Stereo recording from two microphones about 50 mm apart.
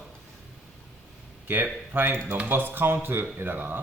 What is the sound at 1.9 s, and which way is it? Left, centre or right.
A man's voice, right.